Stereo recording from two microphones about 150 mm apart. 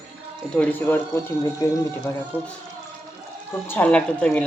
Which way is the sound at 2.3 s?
15° left (ahead or behind).